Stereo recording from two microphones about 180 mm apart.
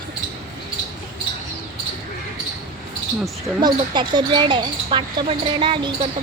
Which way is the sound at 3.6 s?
25° right (ahead or behind).